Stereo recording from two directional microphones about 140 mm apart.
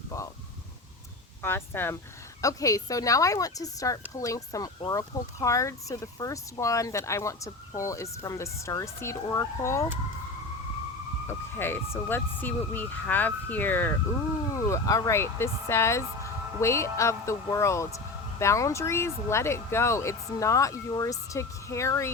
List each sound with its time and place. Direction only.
1.4 s speech: 15° left (ahead or behind)
11.3 s speech: 15° left (ahead or behind)